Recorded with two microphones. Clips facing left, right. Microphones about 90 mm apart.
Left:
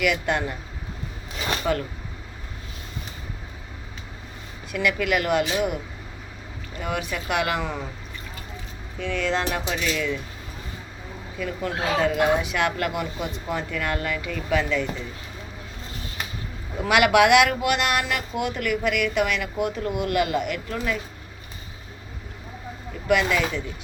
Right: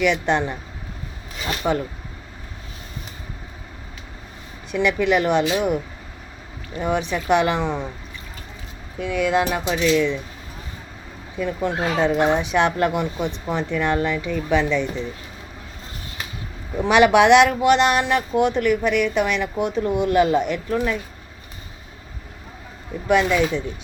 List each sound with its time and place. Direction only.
0.0 s speech: 25° right (ahead or behind)
1.6 s speech: 15° right (ahead or behind)
4.7 s speech: 25° right (ahead or behind)
9.0 s speech: 10° right (ahead or behind)
11.3 s speech: 25° right (ahead or behind)
16.8 s speech: 25° right (ahead or behind)
23.0 s speech: 25° right (ahead or behind)